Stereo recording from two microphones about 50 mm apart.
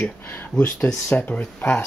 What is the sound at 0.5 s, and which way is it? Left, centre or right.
Speech, left.